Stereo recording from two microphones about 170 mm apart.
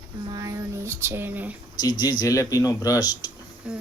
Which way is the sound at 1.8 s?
25° left (ahead or behind).